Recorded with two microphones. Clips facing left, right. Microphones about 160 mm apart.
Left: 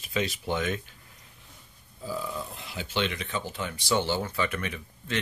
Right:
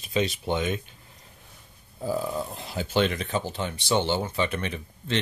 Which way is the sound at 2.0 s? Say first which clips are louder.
Right 6 dB; 45° right (ahead or behind).